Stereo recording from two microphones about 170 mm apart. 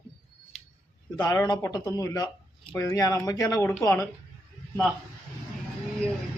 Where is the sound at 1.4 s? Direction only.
20° left (ahead or behind).